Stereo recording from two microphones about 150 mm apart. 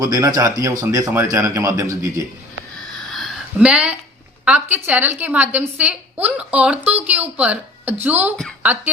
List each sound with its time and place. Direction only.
0.0 s speech: 25° right (ahead or behind)
3.1 s a sound: 5° right (ahead or behind)
4.4 s a woman's voice: 10° right (ahead or behind)